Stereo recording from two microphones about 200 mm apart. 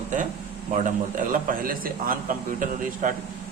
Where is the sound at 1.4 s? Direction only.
45° right (ahead or behind).